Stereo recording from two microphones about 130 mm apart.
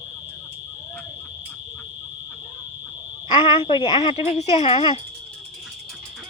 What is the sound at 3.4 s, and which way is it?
A woman's voice, 40° left (ahead or behind).